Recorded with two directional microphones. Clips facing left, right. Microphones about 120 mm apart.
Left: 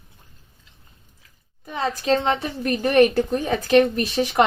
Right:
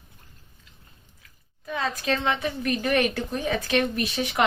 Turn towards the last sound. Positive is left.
turn(degrees=40)  # may be behind; listen again after turning